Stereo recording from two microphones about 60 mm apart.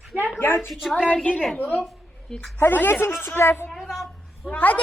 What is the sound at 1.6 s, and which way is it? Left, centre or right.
A child's voice, left.